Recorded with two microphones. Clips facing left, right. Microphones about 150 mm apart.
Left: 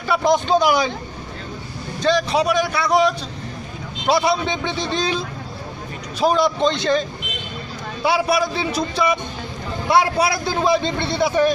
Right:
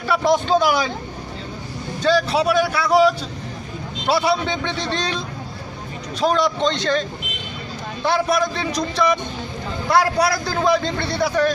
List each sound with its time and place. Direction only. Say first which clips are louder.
0.1 s speech: even; centre (ahead or behind)
2.0 s speech: even; 5° right (ahead or behind)
9.8 s a man's voice: even; 25° left (ahead or behind)